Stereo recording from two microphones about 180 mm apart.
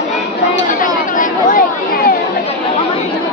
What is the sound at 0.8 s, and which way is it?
Chatter, 45° left (ahead or behind).